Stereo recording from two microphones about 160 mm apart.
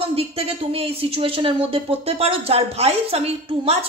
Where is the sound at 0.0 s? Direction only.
35° right (ahead or behind).